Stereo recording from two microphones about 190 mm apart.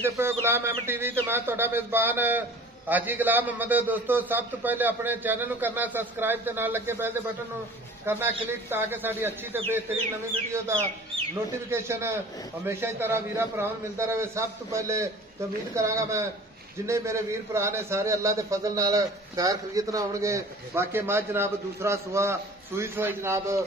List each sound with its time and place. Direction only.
0.0 s a man's voice: 15° right (ahead or behind)
11.7 s a man's voice: 15° right (ahead or behind)